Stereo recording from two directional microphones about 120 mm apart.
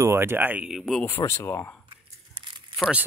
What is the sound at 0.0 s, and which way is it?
Speech, 20° right (ahead or behind).